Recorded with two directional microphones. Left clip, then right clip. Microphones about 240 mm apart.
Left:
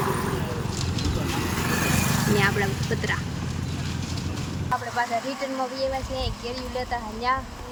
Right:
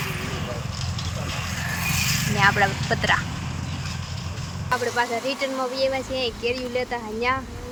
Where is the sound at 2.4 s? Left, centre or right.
Centre.